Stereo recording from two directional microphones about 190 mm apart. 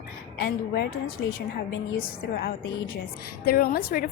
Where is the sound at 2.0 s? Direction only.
50° left (ahead or behind).